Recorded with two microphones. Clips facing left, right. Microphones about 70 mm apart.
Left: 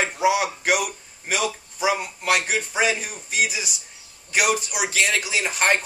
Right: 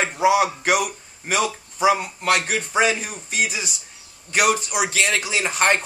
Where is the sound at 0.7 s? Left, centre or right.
Centre.